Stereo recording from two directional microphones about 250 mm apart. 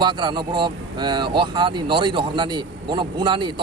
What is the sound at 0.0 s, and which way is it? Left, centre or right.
Speech, centre.